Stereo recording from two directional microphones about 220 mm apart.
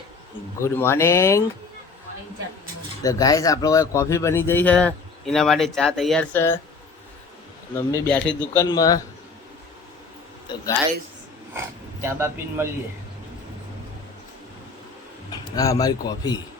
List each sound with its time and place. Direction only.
0.6 s speech: 10° left (ahead or behind)
3.0 s speech: 15° left (ahead or behind)
7.7 s speech: 15° left (ahead or behind)
8.0 s a man's voice: 5° left (ahead or behind)
8.6 s speech: 15° left (ahead or behind)
10.5 s speech: 20° left (ahead or behind)
12.0 s a man's voice: 10° right (ahead or behind)
15.3 s a man's voice: 15° left (ahead or behind)